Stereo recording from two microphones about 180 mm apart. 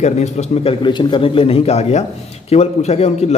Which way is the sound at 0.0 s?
40° left (ahead or behind).